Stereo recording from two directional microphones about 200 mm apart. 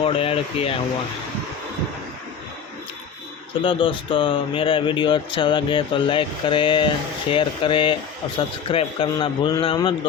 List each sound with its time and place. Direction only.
0.0 s speech: 30° left (ahead or behind)
3.6 s speech: 25° left (ahead or behind)